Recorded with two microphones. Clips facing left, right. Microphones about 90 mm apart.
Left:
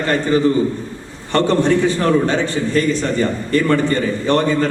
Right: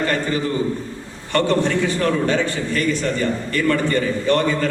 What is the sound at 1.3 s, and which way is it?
A man's voice, 25° left (ahead or behind).